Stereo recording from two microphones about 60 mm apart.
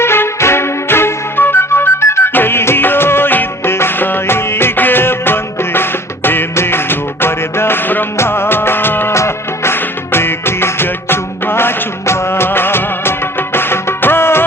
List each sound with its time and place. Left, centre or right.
0.0 s music: left
8.2 s music of bollywood: left
9.1 s music: left